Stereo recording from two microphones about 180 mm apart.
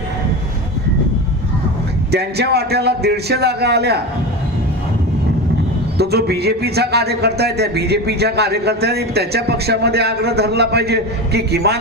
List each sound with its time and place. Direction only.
2.0 s a man's voice: 65° right (ahead or behind)
6.0 s a man's voice: 65° right (ahead or behind)